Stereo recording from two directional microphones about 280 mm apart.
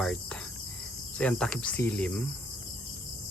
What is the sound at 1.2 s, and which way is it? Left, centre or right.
Speech, centre.